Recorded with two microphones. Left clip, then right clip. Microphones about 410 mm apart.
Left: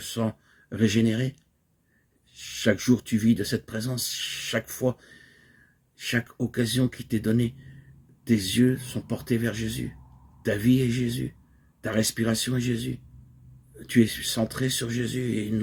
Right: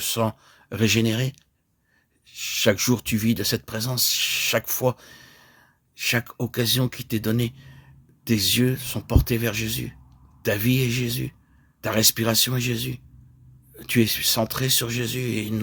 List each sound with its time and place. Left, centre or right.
0.0 s speech: right